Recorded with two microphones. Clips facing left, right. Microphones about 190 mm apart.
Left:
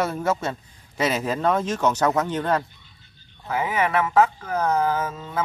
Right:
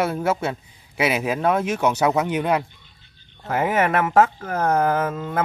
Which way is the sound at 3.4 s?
50° right (ahead or behind).